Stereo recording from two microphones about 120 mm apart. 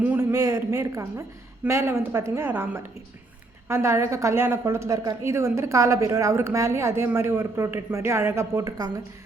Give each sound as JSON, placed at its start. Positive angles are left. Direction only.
{"t": 0.2, "sound": "a woman's voice", "side_deg": -30}